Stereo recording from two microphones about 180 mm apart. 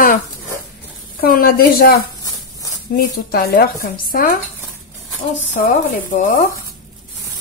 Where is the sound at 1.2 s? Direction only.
55° left (ahead or behind).